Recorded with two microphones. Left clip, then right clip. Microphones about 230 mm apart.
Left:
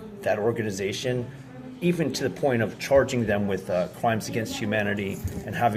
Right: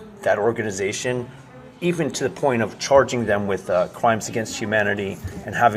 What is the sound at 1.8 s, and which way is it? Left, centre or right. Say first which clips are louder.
Speech: right 3 dB; centre.